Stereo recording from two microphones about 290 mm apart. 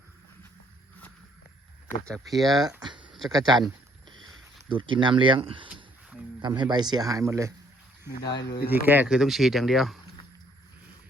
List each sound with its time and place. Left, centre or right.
2.3 s speech: centre
2.6 s speech: centre
3.0 s a sound: centre
3.3 s speech: centre
8.3 s speech: left
8.6 s speech: centre